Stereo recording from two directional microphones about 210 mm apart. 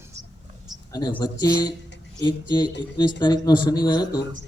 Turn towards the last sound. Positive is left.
turn(degrees=20)  # may be behind; listen again after turning